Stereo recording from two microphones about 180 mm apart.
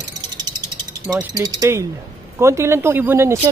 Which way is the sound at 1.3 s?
20° right (ahead or behind).